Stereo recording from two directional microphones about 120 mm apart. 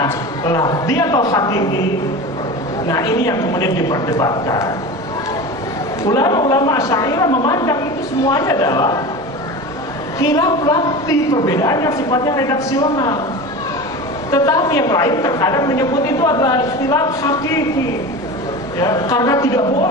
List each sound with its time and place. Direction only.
0.0 s a woman's voice: 30° left (ahead or behind)
2.9 s a woman's voice: 30° left (ahead or behind)
6.1 s a woman's voice: 35° left (ahead or behind)
10.2 s a woman's voice: 30° left (ahead or behind)
14.3 s a woman's voice: 30° left (ahead or behind)
18.8 s a woman's voice: 30° left (ahead or behind)